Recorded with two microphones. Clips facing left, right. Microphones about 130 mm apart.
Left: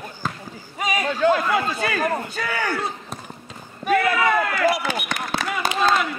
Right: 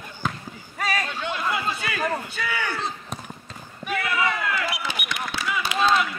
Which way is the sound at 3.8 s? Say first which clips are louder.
Left 6 dB; 45° left (ahead or behind).